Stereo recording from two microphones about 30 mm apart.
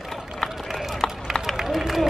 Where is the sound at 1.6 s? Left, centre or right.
Centre.